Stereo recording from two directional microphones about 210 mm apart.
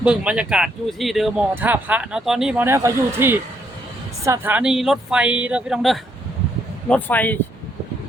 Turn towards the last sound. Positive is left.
turn(degrees=10)  # may be behind; listen again after turning